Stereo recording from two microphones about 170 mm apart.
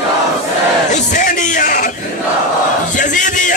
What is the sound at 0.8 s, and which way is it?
Music, 45° left (ahead or behind).